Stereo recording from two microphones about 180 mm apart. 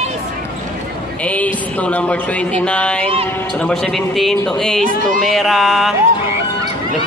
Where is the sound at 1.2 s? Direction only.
10° left (ahead or behind).